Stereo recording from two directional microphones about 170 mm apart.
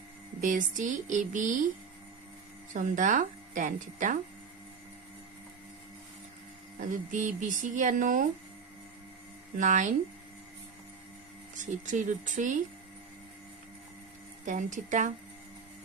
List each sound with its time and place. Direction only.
0.4 s speech: 50° right (ahead or behind)
2.7 s speech: 50° right (ahead or behind)
6.7 s speech: 50° right (ahead or behind)
9.6 s speech: 50° right (ahead or behind)
11.6 s speech: 50° right (ahead or behind)
14.4 s speech: 45° right (ahead or behind)